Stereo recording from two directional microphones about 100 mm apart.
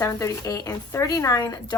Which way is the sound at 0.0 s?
30° left (ahead or behind).